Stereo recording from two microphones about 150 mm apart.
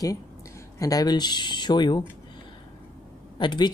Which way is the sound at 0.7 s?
25° left (ahead or behind).